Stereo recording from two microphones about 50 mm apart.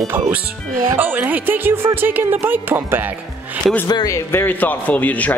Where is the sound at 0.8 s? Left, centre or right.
Right.